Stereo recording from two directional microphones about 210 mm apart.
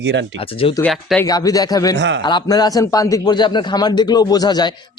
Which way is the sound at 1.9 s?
55° right (ahead or behind).